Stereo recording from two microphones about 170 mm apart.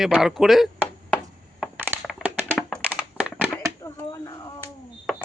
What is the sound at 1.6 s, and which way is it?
Crushing, 10° right (ahead or behind).